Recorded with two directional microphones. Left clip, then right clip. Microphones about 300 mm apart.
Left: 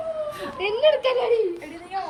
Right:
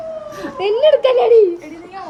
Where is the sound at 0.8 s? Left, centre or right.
Right.